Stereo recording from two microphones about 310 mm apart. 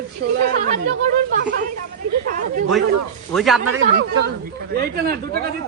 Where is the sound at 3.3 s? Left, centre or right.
Centre.